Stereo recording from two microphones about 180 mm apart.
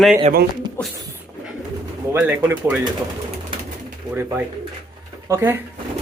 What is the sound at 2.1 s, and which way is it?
Speech, 10° right (ahead or behind).